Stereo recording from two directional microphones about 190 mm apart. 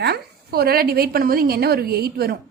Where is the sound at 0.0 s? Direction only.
55° right (ahead or behind).